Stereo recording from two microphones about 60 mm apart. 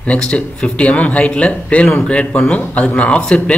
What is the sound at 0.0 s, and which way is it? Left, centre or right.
A man's voice, centre.